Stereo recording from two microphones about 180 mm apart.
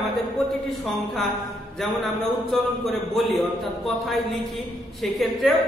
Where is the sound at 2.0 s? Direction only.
Centre (ahead or behind).